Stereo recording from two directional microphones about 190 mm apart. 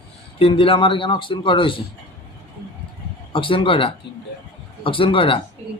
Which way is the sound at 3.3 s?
25° left (ahead or behind).